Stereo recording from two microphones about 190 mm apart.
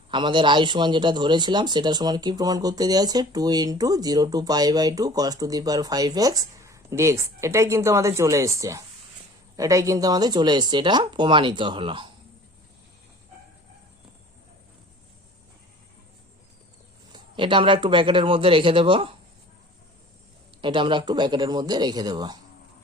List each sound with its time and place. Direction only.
0.1 s a man's voice: 25° right (ahead or behind)
17.1 s a man's voice: 25° right (ahead or behind)
20.6 s a man's voice: 25° right (ahead or behind)